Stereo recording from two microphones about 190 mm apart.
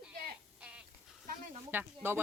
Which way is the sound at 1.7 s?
10° right (ahead or behind).